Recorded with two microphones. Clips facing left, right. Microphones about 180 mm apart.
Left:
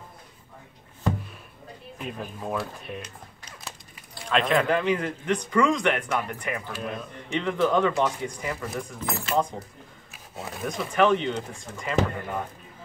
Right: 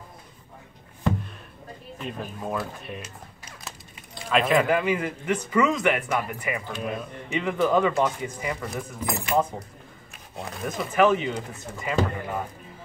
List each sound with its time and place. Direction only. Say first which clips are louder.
2.0 s speech: right 1 dB; centre (ahead or behind)
4.3 s speech: right 2 dB; 5° right (ahead or behind)